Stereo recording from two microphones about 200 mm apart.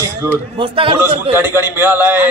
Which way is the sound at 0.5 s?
25° right (ahead or behind).